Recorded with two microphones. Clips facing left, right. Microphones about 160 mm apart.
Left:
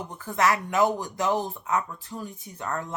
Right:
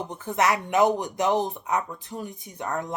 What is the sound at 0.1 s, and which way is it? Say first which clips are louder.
A woman's voice: even; 20° right (ahead or behind).